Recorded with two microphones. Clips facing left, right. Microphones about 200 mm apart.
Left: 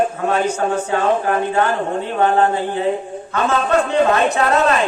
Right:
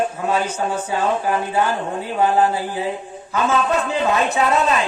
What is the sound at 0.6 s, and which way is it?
Speech, 45° left (ahead or behind).